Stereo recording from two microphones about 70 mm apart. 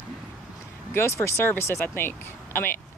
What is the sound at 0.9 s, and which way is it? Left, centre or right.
Speech, left.